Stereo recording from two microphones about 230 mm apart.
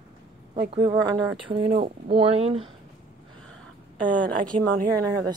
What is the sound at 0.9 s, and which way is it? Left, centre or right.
Speech, centre.